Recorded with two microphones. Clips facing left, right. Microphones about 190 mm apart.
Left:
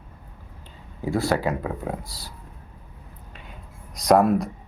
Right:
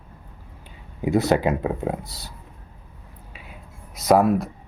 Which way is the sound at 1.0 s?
20° right (ahead or behind).